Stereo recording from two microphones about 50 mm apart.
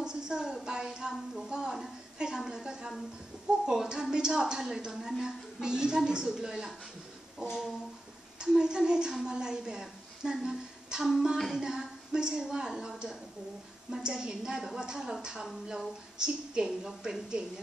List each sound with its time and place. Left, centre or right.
0.0 s a sound: centre
1.5 s a woman's voice: centre
16.2 s a woman's voice: centre